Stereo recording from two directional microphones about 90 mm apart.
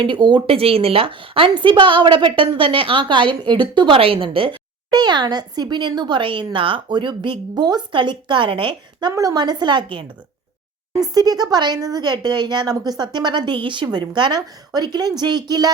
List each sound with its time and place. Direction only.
0.0 s a woman's voice: 60° right (ahead or behind); by 4.5 s 80° right
4.9 s speech: 50° right (ahead or behind)
9.1 s speech: 45° right (ahead or behind); by 10.1 s 65° right (ahead or behind)
11.0 s speech: 45° right (ahead or behind)